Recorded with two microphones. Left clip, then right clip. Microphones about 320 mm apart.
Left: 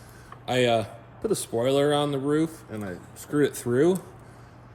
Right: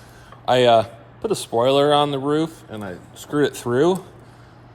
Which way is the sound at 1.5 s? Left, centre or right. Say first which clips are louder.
Right 8 dB; centre.